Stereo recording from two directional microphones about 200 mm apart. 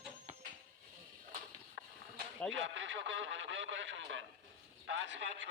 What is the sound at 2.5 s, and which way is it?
A man's voice, 70° right (ahead or behind).